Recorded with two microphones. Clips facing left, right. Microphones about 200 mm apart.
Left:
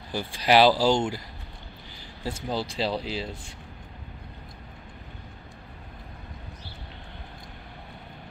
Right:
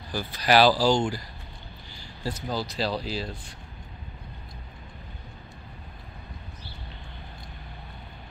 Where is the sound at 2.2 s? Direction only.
25° left (ahead or behind).